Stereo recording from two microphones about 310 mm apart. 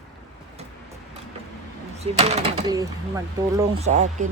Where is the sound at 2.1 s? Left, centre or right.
Centre.